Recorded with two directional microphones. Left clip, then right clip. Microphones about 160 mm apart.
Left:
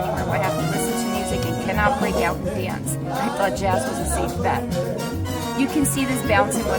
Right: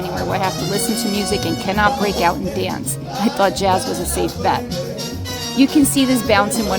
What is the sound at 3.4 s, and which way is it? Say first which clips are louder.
Speech: right 7 dB; 40° right (ahead or behind).